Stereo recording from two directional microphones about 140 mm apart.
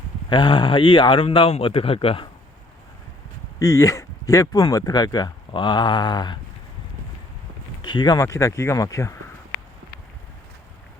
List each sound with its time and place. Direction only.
0.3 s speech: 35° left (ahead or behind)
3.6 s speech: 25° left (ahead or behind)
7.8 s speech: 35° left (ahead or behind)